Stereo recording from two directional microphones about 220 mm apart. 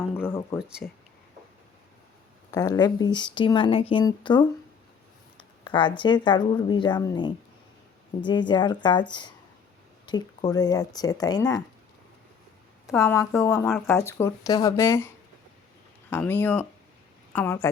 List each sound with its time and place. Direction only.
0.2 s speech: 10° left (ahead or behind)
2.5 s speech: 15° left (ahead or behind)
13.0 s speech: 15° left (ahead or behind)
13.7 s speech: 5° left (ahead or behind)